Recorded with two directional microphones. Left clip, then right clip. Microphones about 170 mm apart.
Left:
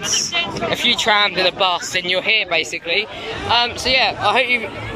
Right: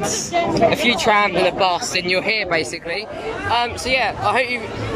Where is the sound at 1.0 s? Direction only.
5° right (ahead or behind).